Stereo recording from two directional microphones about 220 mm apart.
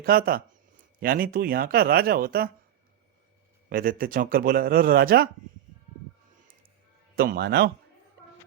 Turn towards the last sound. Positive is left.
turn(degrees=-45)  # may be behind; listen again after turning